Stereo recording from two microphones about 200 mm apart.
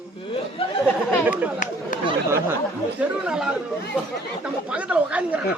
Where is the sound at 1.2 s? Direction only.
10° right (ahead or behind).